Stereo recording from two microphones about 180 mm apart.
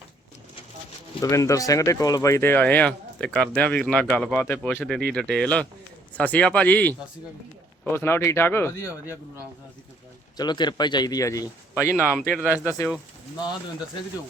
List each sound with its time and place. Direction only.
1.2 s speech: 15° left (ahead or behind)
7.9 s speech: 15° left (ahead or behind)
10.3 s speech: 25° left (ahead or behind)
12.4 s speech: 10° right (ahead or behind)